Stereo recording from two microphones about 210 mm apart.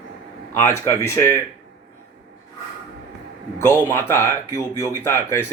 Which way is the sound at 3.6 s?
15° left (ahead or behind).